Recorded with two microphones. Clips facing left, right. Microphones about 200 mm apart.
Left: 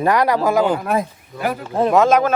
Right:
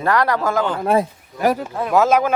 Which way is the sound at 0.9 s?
35° right (ahead or behind).